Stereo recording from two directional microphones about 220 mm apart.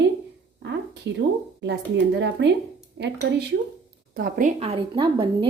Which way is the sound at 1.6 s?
50° right (ahead or behind).